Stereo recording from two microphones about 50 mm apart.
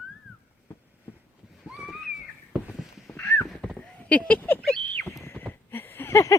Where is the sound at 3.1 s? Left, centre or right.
Left.